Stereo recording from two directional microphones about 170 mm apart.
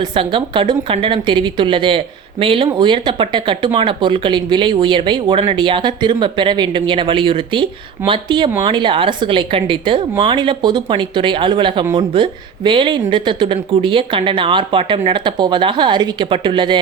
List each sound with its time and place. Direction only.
0.1 s speech: 30° right (ahead or behind)